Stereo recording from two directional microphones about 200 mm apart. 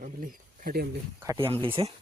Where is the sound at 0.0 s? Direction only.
45° right (ahead or behind).